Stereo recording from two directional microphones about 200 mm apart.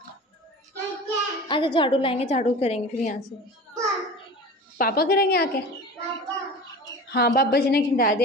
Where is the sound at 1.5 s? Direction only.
25° left (ahead or behind).